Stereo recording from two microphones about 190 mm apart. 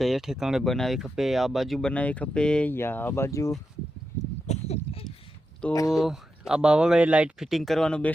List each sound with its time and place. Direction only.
0.0 s speech: centre (ahead or behind); by 3.5 s 15° left (ahead or behind)
4.4 s a sound: 35° left (ahead or behind)
5.9 s speech: centre (ahead or behind)